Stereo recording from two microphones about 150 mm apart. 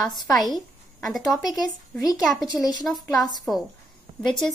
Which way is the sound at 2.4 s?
25° left (ahead or behind).